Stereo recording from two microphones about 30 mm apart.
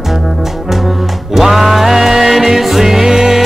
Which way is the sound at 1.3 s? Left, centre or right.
Centre.